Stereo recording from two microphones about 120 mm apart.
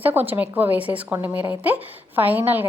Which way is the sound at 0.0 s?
15° right (ahead or behind).